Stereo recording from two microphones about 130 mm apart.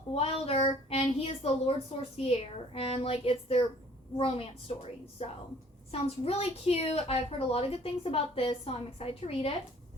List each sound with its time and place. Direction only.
0.1 s a woman's voice: 45° left (ahead or behind)
5.2 s a woman's voice: 50° left (ahead or behind)